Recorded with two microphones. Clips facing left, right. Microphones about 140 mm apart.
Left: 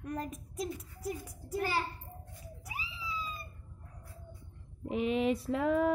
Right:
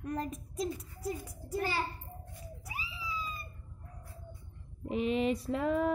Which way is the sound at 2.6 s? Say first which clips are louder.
Even; 20° left (ahead or behind).